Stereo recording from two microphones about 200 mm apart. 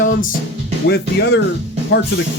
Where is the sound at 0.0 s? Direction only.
45° left (ahead or behind).